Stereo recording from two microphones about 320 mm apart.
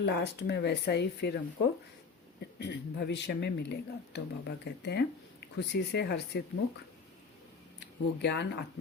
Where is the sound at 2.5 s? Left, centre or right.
Left.